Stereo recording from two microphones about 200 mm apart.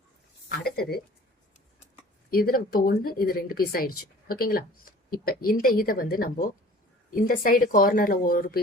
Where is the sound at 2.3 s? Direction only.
50° left (ahead or behind).